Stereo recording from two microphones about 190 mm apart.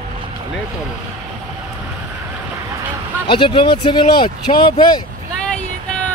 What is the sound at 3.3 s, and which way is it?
Speech, 25° left (ahead or behind).